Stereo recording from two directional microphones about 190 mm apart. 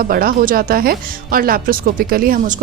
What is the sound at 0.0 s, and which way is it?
A woman's voice, 50° right (ahead or behind).